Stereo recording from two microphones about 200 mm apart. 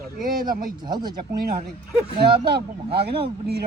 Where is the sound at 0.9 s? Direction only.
20° right (ahead or behind).